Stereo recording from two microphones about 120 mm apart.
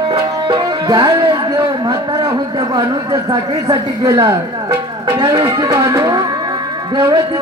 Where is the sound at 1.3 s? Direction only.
40° right (ahead or behind).